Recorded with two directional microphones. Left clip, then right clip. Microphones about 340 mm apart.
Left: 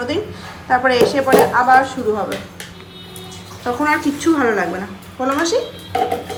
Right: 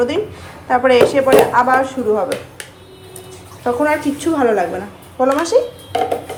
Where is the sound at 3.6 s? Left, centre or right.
Centre.